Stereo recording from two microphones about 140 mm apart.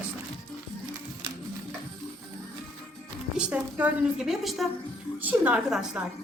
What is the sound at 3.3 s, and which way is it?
A woman's voice, 10° right (ahead or behind).